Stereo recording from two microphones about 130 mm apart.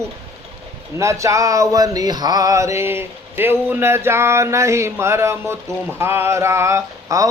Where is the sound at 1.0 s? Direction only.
20° right (ahead or behind).